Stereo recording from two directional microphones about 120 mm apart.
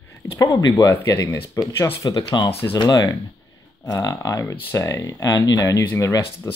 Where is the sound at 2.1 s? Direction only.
40° left (ahead or behind).